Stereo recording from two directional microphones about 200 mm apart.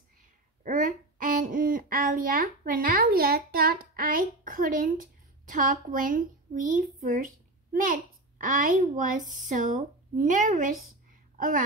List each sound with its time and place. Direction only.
0.7 s a child's voice: 40° right (ahead or behind)